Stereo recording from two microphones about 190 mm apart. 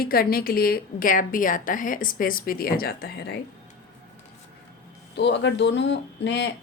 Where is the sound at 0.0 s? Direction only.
50° left (ahead or behind).